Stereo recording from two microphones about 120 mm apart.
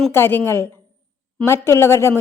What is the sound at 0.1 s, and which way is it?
A woman's voice, 20° left (ahead or behind).